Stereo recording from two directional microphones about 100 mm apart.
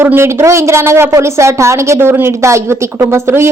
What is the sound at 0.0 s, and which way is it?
A woman's voice, 25° right (ahead or behind).